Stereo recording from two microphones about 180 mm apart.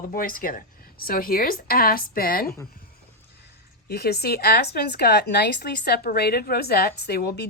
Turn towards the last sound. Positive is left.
turn(degrees=60)  # may be behind; listen again after turning